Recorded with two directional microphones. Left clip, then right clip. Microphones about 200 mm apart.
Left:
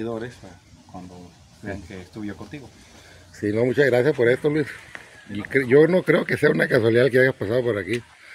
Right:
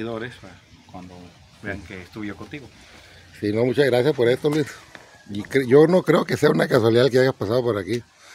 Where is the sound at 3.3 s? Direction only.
15° right (ahead or behind).